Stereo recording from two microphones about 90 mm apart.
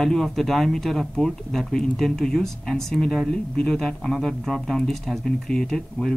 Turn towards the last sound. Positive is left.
turn(degrees=5)  # may be behind; listen again after turning